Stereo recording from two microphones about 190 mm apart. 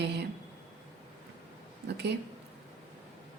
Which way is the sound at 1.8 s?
60° right (ahead or behind).